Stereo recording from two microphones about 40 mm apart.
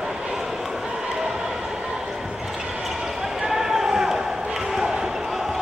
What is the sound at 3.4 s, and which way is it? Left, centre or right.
Basketball bounce, centre.